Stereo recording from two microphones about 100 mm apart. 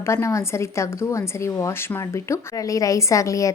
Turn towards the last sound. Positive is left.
turn(degrees=30)  # may be behind; listen again after turning